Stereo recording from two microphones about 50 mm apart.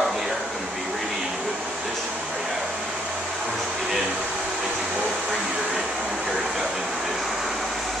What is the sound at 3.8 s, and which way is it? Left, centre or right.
Speech, centre.